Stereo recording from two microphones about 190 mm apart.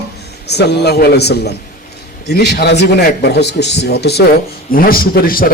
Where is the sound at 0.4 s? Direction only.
60° left (ahead or behind).